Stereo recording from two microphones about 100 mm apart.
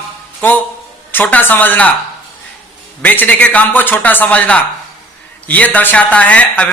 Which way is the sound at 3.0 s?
15° left (ahead or behind).